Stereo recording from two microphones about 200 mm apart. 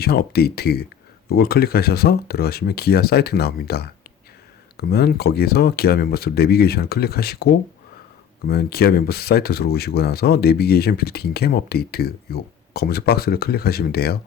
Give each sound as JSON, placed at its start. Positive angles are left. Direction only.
{"t": 0.0, "sound": "speech", "side_deg": 50}